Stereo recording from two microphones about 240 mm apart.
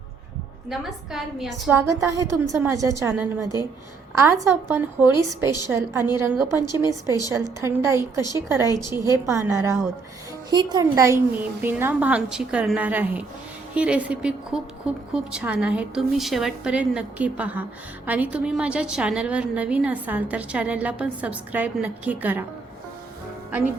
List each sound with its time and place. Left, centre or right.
0.7 s a woman's voice: centre
8.6 s a woman's voice: centre
8.9 s a woman's voice: centre